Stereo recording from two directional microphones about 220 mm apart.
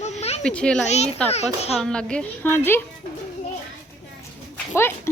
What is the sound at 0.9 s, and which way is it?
Speech, 30° left (ahead or behind).